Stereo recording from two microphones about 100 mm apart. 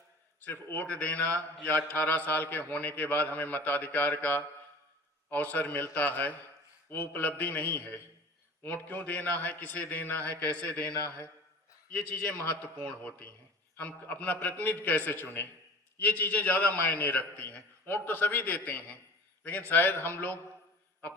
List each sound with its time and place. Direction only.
0.4 s a man's voice: 20° left (ahead or behind)
12.8 s a man's voice: 15° left (ahead or behind)